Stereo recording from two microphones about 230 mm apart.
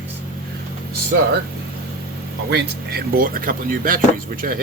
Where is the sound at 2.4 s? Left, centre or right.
Right.